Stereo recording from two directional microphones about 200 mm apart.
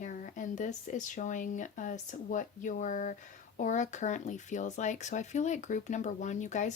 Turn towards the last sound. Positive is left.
turn(degrees=40)  # may be behind; listen again after turning